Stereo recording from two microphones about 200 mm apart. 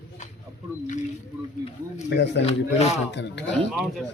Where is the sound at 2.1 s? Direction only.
60° left (ahead or behind).